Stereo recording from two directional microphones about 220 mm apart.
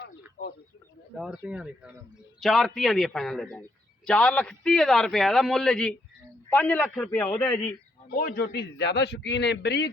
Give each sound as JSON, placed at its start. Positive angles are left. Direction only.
{"t": 0.4, "sound": "a sound", "side_deg": 35}
{"t": 1.2, "sound": "a man's voice", "side_deg": -5}
{"t": 8.1, "sound": "a man's voice", "side_deg": 40}